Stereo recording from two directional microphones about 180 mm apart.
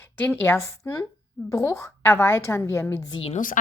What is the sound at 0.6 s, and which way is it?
A woman's voice, 15° left (ahead or behind).